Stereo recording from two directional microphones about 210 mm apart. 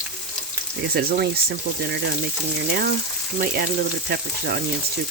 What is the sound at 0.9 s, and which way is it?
Frying, 45° right (ahead or behind).